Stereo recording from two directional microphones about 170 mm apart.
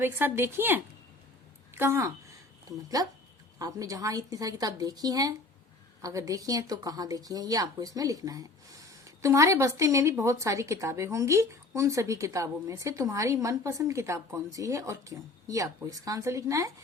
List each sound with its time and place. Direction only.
0.0 s a woman's voice: 10° right (ahead or behind)